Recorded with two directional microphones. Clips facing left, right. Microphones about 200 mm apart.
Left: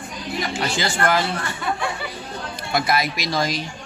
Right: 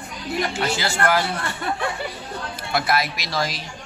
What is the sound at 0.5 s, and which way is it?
Speech, 5° right (ahead or behind).